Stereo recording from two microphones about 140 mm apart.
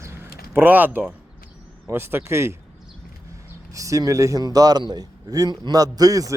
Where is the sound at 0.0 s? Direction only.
20° right (ahead or behind).